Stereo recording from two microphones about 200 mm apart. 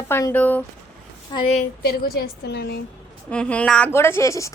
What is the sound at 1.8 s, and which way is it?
Speech, 50° left (ahead or behind).